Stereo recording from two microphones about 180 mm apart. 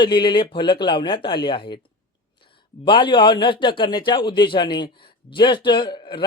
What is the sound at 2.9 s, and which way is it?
A woman's voice, 25° left (ahead or behind).